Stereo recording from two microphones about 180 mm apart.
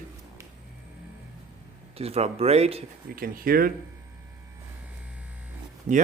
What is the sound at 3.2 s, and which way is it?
Speech, 55° right (ahead or behind).